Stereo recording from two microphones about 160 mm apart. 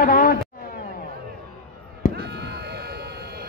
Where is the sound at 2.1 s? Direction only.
90° right.